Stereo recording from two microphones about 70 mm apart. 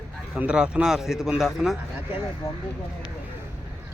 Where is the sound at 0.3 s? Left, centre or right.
Centre.